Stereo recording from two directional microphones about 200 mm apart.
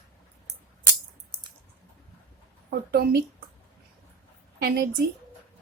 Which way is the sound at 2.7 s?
50° right (ahead or behind).